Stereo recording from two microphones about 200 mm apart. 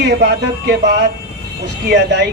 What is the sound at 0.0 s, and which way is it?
Speech, 55° right (ahead or behind).